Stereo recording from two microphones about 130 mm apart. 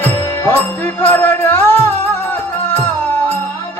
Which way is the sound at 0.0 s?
15° left (ahead or behind).